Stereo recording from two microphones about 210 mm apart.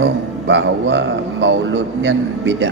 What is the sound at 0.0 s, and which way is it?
A man's voice, 60° right (ahead or behind).